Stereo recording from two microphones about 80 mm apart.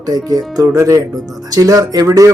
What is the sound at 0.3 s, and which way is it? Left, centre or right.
Speech, right.